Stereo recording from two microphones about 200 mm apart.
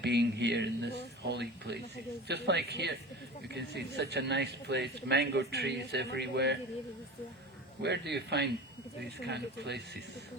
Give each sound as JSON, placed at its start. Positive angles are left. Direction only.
{"t": 0.0, "sound": "speech", "side_deg": -55}
{"t": 7.8, "sound": "speech", "side_deg": -60}